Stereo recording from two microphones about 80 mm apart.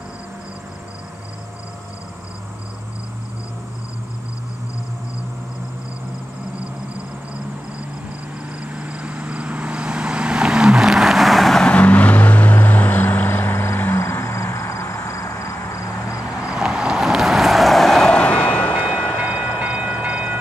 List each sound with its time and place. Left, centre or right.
8.6 s vehicle: centre; by 16.2 s left
16.4 s vehicle: centre
19.6 s train: centre